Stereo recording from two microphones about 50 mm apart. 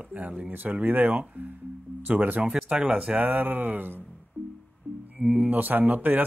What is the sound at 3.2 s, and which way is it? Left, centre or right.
Speech, right.